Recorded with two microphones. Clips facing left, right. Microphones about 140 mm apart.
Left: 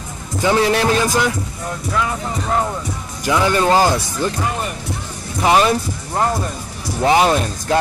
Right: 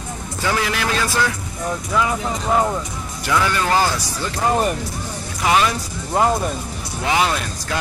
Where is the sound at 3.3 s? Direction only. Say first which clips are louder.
Left 4 dB; 20° left (ahead or behind).